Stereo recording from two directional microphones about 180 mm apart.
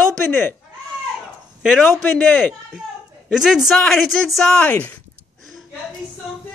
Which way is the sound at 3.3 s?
Centre (ahead or behind).